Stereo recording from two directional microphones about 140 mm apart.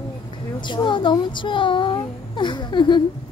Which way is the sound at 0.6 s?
35° left (ahead or behind).